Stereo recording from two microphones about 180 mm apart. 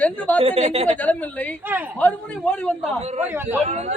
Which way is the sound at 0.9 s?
10° left (ahead or behind).